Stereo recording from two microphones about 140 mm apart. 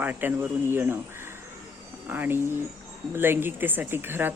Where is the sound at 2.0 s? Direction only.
15° right (ahead or behind).